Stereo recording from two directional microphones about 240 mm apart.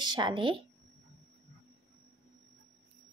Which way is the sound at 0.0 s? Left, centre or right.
Centre.